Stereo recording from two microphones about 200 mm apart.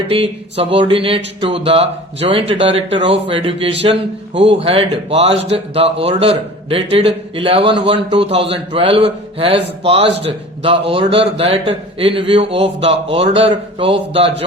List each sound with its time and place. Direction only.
0.1 s a man's voice: 30° right (ahead or behind)